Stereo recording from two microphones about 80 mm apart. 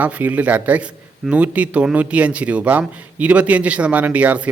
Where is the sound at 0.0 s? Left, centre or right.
Centre.